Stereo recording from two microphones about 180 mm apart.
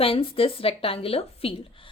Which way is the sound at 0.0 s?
30° left (ahead or behind).